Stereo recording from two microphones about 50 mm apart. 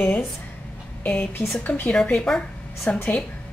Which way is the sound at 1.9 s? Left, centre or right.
Centre.